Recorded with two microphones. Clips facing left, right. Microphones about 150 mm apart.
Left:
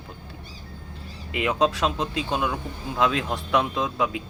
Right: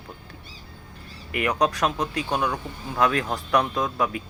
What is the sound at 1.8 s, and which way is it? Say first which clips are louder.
Speech: even; 25° left (ahead or behind).